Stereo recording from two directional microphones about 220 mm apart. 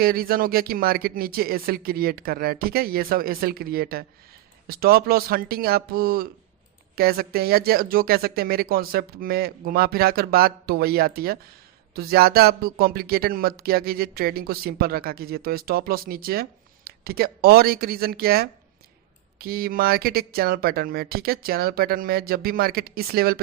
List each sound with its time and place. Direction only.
0.0 s speech: 40° right (ahead or behind)